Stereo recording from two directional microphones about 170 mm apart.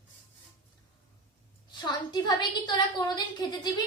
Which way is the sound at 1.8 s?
25° left (ahead or behind).